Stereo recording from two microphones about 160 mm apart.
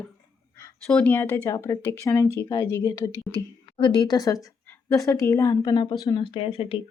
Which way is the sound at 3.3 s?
30° left (ahead or behind).